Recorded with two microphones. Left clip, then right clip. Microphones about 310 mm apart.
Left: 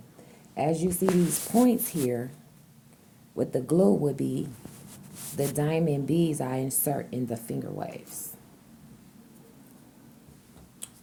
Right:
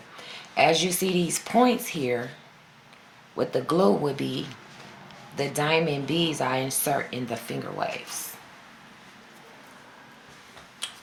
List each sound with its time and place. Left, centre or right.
0.5 s speech: left
3.3 s speech: left
10.8 s typing: left